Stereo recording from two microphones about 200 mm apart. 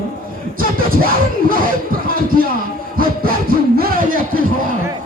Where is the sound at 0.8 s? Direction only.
45° right (ahead or behind).